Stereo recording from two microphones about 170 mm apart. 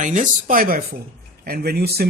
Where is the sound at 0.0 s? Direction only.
50° right (ahead or behind).